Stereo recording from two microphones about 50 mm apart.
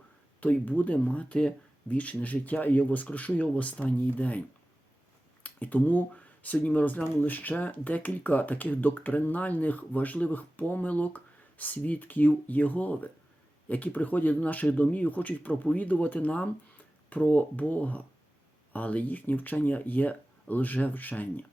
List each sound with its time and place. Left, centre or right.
0.3 s speech: left